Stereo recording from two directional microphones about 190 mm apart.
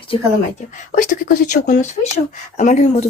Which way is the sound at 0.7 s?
40° left (ahead or behind).